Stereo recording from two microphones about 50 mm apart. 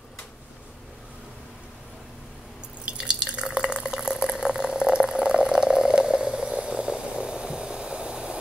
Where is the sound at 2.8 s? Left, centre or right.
Centre.